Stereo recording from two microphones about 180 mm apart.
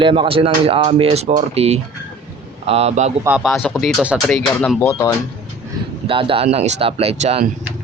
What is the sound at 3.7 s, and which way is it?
Speech, centre (ahead or behind).